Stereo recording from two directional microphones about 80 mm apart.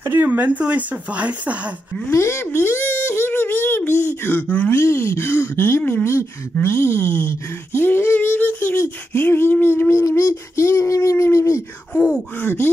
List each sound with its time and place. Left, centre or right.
0.1 s speech: right
2.0 s speech: left
12.4 s speech: left